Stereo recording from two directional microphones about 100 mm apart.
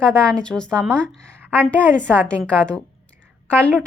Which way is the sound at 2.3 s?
10° left (ahead or behind).